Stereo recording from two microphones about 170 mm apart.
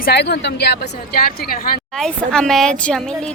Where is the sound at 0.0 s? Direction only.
75° left (ahead or behind).